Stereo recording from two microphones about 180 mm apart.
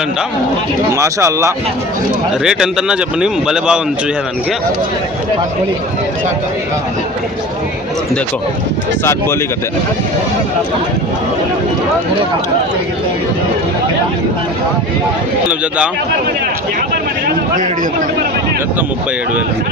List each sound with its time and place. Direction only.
0.9 s speech: 15° right (ahead or behind)
2.4 s speech: 5° right (ahead or behind)